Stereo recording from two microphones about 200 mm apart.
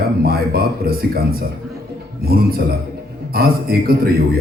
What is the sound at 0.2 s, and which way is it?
Speech, 50° right (ahead or behind).